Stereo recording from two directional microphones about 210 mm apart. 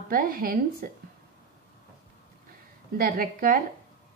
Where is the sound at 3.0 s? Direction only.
45° right (ahead or behind).